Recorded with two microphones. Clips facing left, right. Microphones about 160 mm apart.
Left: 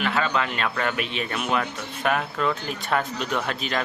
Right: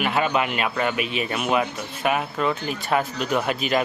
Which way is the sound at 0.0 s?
15° right (ahead or behind).